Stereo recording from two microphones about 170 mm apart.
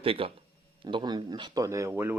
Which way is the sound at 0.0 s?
30° right (ahead or behind).